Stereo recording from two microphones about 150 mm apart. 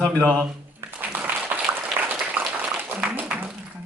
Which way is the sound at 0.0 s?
10° left (ahead or behind).